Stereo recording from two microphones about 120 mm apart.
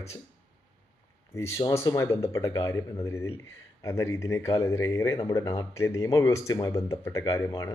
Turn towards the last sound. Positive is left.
turn(degrees=25)  # may be behind; listen again after turning